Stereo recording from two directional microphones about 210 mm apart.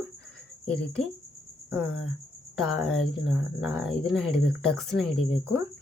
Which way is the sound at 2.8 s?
Centre (ahead or behind).